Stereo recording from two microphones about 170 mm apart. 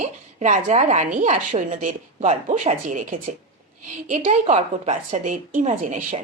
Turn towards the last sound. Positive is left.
turn(degrees=-50)  # may be behind; listen again after turning